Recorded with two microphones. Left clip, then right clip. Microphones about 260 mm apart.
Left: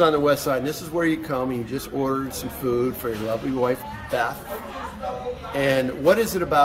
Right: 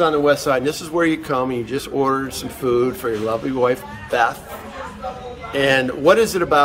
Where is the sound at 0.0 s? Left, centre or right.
Centre.